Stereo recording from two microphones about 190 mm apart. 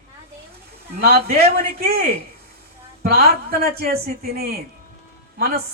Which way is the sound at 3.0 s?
55° right (ahead or behind).